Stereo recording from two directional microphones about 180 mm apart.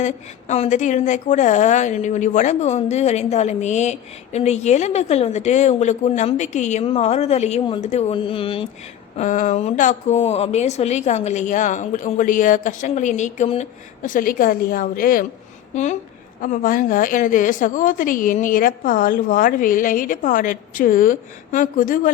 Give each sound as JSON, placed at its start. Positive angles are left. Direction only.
{"t": 0.0, "sound": "a woman's voice", "side_deg": 40}
{"t": 9.1, "sound": "a woman's voice", "side_deg": 40}
{"t": 15.7, "sound": "a woman's voice", "side_deg": 40}